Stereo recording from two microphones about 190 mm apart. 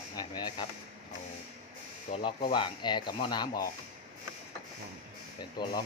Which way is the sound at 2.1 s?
30° left (ahead or behind).